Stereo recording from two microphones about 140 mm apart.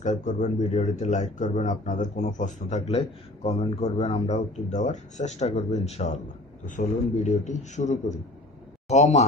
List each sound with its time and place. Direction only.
0.0 s speech: 60° left (ahead or behind)
7.2 s a man's voice: 55° left (ahead or behind)